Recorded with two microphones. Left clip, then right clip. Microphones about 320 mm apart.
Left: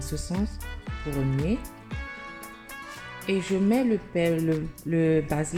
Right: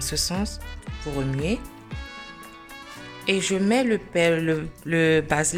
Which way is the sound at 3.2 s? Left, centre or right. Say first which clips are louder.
Right 3 dB; right.